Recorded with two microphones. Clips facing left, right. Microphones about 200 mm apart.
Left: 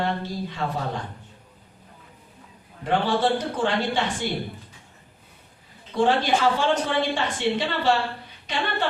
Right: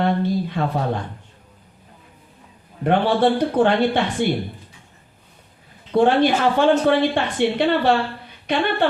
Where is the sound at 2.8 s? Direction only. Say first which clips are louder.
Right 5 dB; 60° right (ahead or behind).